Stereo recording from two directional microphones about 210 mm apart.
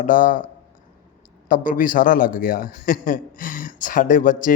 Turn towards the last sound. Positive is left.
turn(degrees=40)  # may be behind; listen again after turning